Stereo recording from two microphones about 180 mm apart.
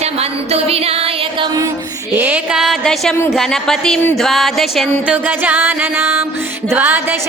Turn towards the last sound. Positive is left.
turn(degrees=-10)  # may be behind; listen again after turning